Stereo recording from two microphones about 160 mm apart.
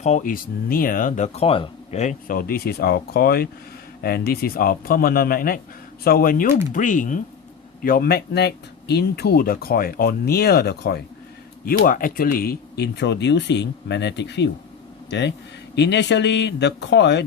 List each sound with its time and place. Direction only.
0.0 s speech: 50° left (ahead or behind)
7.9 s speech: 70° left (ahead or behind); by 11.0 s 90° left
11.6 s speech: 60° left (ahead or behind); by 14.5 s 90° left
15.7 s speech: 90° left